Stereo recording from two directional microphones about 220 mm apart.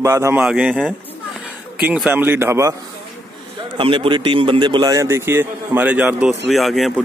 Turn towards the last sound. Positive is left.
turn(degrees=0)  # may be behind; listen again after turning